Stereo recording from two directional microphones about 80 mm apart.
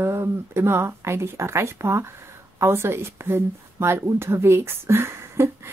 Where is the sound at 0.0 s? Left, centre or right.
Right.